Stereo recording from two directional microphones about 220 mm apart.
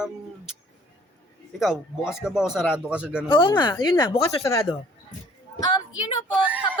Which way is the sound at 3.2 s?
20° left (ahead or behind).